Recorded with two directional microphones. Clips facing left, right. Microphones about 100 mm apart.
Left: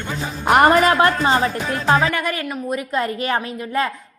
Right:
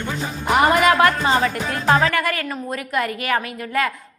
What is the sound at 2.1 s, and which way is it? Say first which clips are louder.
A woman's voice: right 1 dB; 20° left (ahead or behind).